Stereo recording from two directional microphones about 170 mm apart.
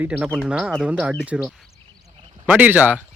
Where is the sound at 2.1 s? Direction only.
30° right (ahead or behind).